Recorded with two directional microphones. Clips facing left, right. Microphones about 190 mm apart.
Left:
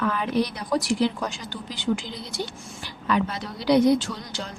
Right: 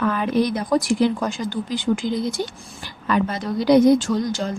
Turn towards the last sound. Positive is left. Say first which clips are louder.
# right 10 dB
turn(degrees=-45)  # may be behind; listen again after turning